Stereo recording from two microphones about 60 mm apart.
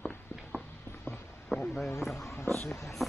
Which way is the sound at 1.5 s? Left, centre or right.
Left.